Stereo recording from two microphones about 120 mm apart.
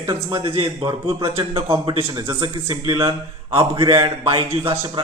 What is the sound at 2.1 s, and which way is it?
Speech, 35° right (ahead or behind).